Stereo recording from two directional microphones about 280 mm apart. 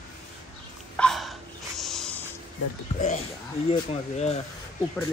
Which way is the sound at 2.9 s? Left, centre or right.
Left.